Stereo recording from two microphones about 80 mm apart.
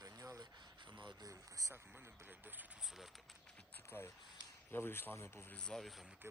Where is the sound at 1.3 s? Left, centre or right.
Right.